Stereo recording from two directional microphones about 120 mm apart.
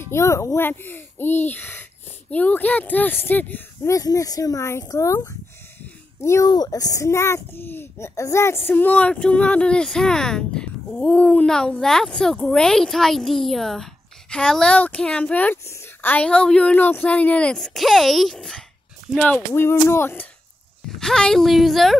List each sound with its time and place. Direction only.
0.0 s a child's voice: 25° left (ahead or behind)
3.9 s a child's voice: 30° left (ahead or behind)
21.0 s speech: 5° left (ahead or behind)